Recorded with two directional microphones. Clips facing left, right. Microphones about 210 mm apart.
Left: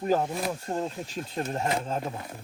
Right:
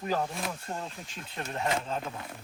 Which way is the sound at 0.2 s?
35° left (ahead or behind).